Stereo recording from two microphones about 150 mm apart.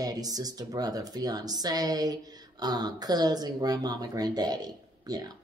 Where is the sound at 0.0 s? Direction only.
25° right (ahead or behind).